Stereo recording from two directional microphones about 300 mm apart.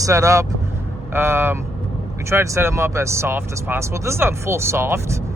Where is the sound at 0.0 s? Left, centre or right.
Centre.